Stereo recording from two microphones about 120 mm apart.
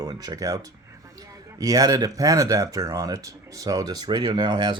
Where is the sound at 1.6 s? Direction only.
30° right (ahead or behind).